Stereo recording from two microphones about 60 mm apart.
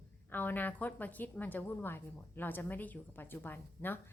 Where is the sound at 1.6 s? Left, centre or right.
Left.